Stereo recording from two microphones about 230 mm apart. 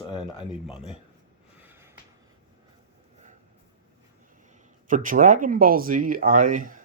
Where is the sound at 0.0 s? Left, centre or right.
Left.